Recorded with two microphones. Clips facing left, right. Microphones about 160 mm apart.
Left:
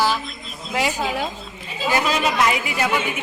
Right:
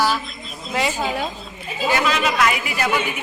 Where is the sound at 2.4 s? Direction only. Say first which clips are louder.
Even; 25° left (ahead or behind).